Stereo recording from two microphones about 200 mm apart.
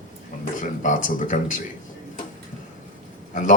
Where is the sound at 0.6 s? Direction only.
40° left (ahead or behind).